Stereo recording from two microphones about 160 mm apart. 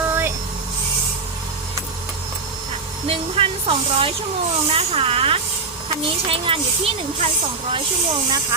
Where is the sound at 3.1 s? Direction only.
35° right (ahead or behind).